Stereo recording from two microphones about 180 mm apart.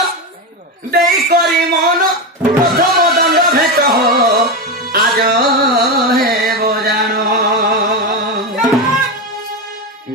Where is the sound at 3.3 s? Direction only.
55° right (ahead or behind).